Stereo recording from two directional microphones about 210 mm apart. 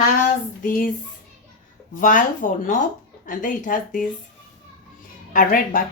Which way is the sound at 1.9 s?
40° left (ahead or behind).